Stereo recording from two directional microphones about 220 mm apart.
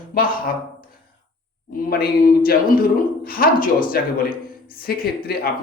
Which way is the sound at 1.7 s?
45° left (ahead or behind).